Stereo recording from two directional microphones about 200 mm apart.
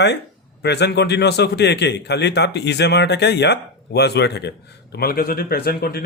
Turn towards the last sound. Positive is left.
turn(degrees=50)  # may be behind; listen again after turning